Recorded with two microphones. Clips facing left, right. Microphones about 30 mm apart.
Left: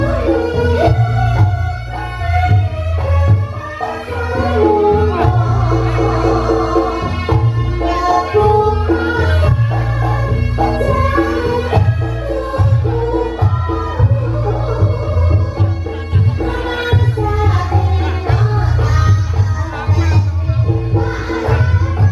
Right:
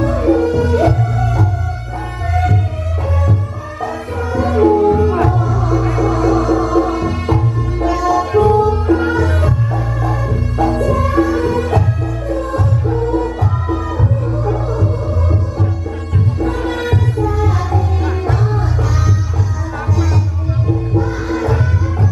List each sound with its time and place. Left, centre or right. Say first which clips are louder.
0.0 s music: right 1 dB; left
4.3 s music: even; left
10.6 s music: even; left
16.3 s music: right 1 dB; left
20.7 s music: right 1 dB; left